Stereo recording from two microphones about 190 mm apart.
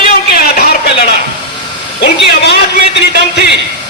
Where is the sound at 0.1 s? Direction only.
55° left (ahead or behind).